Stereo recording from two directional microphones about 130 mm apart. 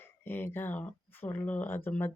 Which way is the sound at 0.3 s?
15° left (ahead or behind).